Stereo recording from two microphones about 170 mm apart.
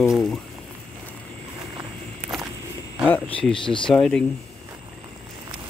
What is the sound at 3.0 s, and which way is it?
Speech, 10° left (ahead or behind).